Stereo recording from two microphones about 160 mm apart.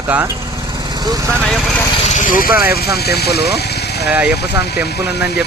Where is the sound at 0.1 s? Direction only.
10° right (ahead or behind).